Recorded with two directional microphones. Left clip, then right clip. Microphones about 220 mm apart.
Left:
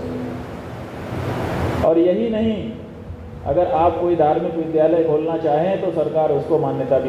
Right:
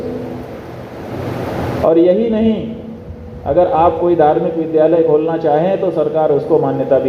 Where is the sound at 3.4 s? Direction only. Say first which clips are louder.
Right 5 dB; 40° right (ahead or behind).